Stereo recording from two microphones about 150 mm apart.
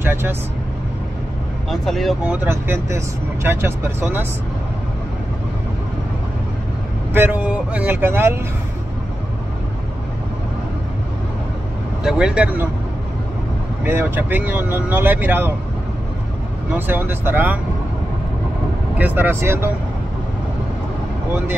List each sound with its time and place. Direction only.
0.0 s speech: 15° right (ahead or behind)
1.7 s speech: centre (ahead or behind)
2.3 s speech: 15° right (ahead or behind)
7.2 s speech: 10° right (ahead or behind)
12.0 s speech: 5° right (ahead or behind)
13.8 s speech: 15° right (ahead or behind)
16.7 s speech: 15° right (ahead or behind)
18.9 s speech: 10° right (ahead or behind)